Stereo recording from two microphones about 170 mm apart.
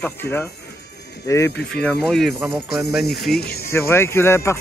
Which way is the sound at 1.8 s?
5° left (ahead or behind).